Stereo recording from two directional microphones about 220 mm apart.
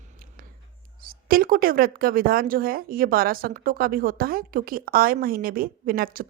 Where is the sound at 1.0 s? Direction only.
40° right (ahead or behind).